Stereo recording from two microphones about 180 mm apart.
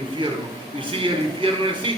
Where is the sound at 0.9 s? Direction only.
30° right (ahead or behind).